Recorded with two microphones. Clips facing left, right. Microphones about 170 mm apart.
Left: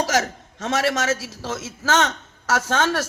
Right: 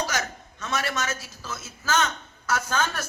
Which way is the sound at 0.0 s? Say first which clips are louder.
Left 7 dB; 90° left.